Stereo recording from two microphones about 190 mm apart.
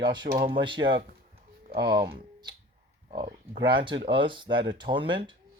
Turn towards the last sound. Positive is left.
turn(degrees=-25)  # may be behind; listen again after turning